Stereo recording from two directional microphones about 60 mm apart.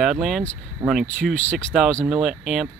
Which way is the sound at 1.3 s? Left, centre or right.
Left.